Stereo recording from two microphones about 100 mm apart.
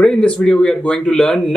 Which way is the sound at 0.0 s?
10° left (ahead or behind).